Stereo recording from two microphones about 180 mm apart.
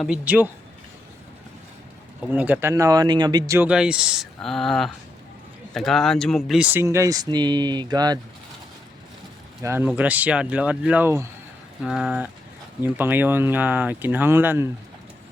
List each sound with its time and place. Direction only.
0.0 s speech: 5° right (ahead or behind)
2.2 s speech: 10° right (ahead or behind)
9.6 s speech: 10° right (ahead or behind)
11.8 s speech: centre (ahead or behind)